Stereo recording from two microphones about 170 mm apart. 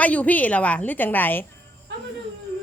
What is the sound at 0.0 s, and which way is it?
Speech, 10° left (ahead or behind).